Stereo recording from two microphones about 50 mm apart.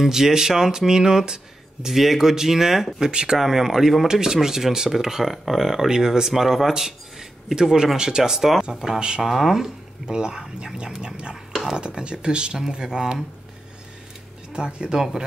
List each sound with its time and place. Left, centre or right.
0.0 s speech: centre
9.3 s speech: centre
14.5 s speech: centre